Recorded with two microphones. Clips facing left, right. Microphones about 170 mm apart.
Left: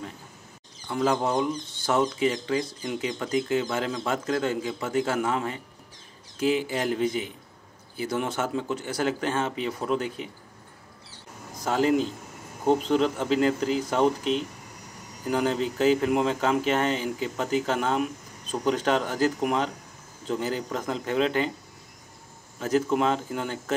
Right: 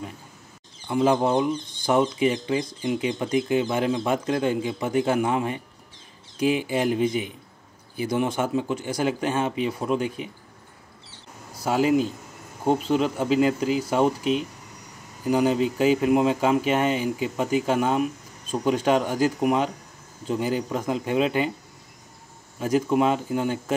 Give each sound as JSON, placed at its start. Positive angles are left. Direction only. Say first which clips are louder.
{"t": 1.9, "sound": "speech", "louder": "right 3 dB", "side_deg": -15}
{"t": 2.8, "sound": "speech", "louder": "right 5 dB", "side_deg": -5}
{"t": 3.3, "sound": "speech", "louder": "right 2 dB", "side_deg": -20}
{"t": 11.5, "sound": "speech", "louder": "right 2 dB", "side_deg": -10}
{"t": 22.6, "sound": "speech", "louder": "right 2 dB", "side_deg": -10}